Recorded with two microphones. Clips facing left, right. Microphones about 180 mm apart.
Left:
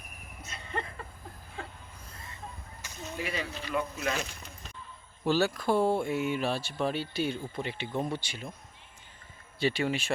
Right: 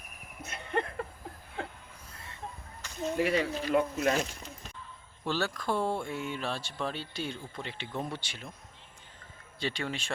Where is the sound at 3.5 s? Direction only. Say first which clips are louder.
Right 5 dB; 50° right (ahead or behind).